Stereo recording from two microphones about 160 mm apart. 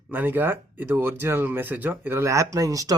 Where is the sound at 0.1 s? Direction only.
10° right (ahead or behind).